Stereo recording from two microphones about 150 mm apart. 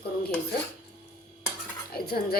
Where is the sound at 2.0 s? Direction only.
90° left.